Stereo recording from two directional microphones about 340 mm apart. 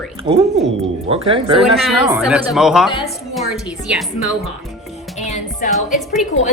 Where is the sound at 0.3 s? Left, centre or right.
Centre.